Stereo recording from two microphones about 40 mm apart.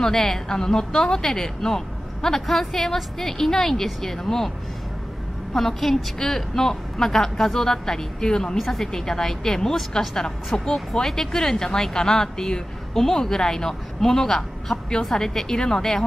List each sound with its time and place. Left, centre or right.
0.0 s speech: centre
5.5 s speech: centre
10.7 s speech: centre